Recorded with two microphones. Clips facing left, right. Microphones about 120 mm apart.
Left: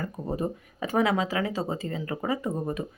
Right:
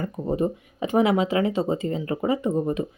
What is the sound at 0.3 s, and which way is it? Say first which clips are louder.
Speech: right 6 dB; 20° right (ahead or behind).